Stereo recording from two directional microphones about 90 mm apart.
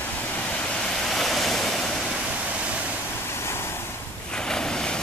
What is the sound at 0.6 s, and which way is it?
Waves, 10° left (ahead or behind).